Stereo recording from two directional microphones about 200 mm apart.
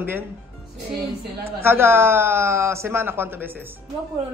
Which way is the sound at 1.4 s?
10° right (ahead or behind).